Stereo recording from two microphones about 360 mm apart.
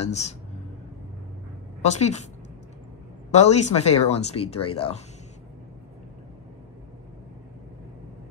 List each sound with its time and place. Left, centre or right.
0.0 s speech: centre
1.8 s a woman's voice: centre
3.3 s speech: centre